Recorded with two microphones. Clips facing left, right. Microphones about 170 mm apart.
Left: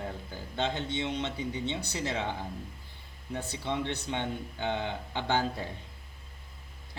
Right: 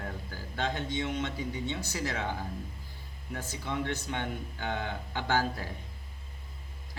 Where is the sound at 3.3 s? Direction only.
20° left (ahead or behind).